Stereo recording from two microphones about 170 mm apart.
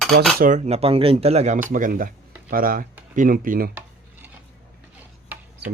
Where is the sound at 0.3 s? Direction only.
50° right (ahead or behind).